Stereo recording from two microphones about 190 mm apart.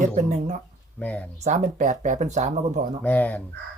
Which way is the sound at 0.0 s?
35° right (ahead or behind).